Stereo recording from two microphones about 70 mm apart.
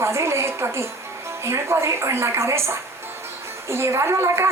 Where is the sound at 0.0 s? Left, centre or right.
Right.